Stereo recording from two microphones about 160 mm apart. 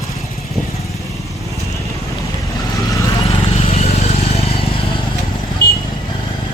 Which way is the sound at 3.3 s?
40° left (ahead or behind).